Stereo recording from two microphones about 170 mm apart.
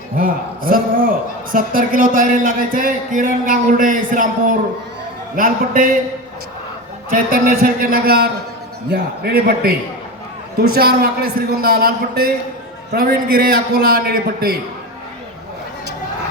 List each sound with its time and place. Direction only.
0.2 s a man's voice: 55° right (ahead or behind)
7.1 s a man's voice: 55° right (ahead or behind)